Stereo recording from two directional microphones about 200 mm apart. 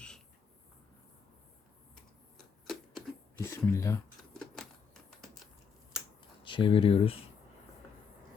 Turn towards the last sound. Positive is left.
turn(degrees=30)  # may be behind; listen again after turning